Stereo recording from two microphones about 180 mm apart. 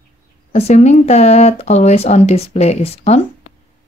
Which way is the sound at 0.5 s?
35° left (ahead or behind).